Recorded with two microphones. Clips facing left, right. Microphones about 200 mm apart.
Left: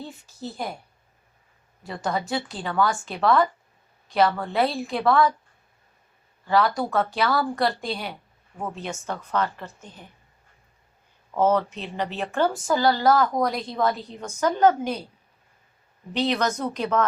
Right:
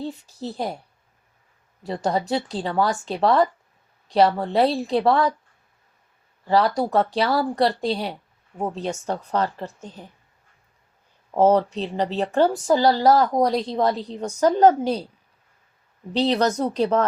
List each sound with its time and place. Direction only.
0.0 s speech: 35° right (ahead or behind)
1.8 s speech: 35° right (ahead or behind)
6.5 s speech: 35° right (ahead or behind)
11.3 s speech: 35° right (ahead or behind)
16.1 s speech: 35° right (ahead or behind)